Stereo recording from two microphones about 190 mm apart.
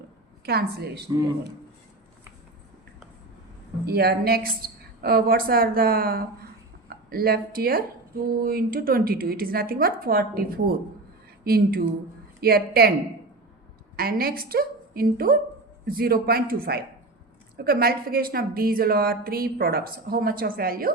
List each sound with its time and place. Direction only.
0.4 s a woman's voice: 55° right (ahead or behind)
1.1 s a man's voice: 20° right (ahead or behind)
3.8 s a woman's voice: 55° right (ahead or behind)
13.9 s a woman's voice: 50° right (ahead or behind)